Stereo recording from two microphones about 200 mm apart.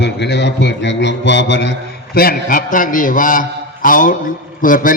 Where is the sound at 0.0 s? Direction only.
60° left (ahead or behind).